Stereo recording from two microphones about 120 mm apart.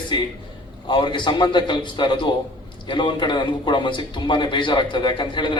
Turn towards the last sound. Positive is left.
turn(degrees=40)  # may be behind; listen again after turning